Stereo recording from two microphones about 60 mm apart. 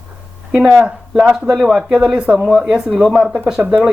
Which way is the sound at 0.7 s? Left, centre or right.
Centre.